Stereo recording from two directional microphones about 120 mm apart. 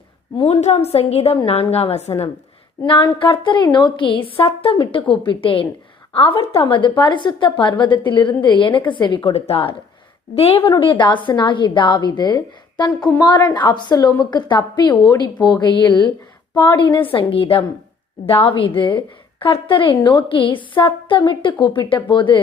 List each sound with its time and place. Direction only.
0.4 s a woman's voice: 60° left (ahead or behind)
2.8 s a woman's voice: 45° left (ahead or behind)
10.7 s a woman's voice: 40° left (ahead or behind)